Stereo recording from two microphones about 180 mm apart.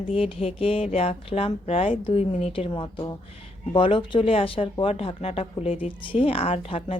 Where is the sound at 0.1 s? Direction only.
30° left (ahead or behind).